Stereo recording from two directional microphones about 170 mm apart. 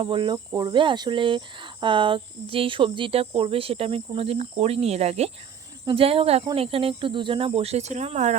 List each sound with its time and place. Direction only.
0.0 s speech: 30° right (ahead or behind)